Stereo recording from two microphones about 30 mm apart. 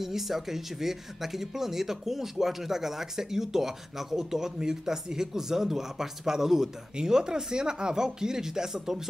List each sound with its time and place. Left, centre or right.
0.0 s speech: centre